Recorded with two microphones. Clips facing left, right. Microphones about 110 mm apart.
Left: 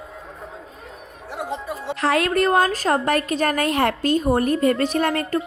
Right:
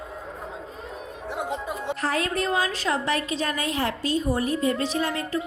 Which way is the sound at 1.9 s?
85° left.